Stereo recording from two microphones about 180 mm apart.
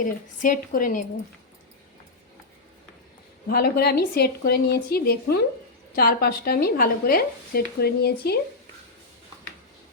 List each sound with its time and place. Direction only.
0.0 s a woman's voice: 50° left (ahead or behind)
3.5 s speech: 60° left (ahead or behind)